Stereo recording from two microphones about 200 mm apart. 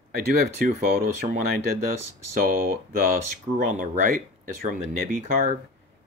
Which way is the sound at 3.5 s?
40° right (ahead or behind).